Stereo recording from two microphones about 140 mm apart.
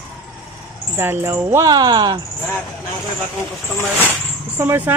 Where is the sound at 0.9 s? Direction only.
15° right (ahead or behind).